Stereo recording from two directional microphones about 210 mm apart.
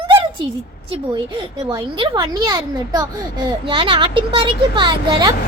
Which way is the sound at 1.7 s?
25° right (ahead or behind).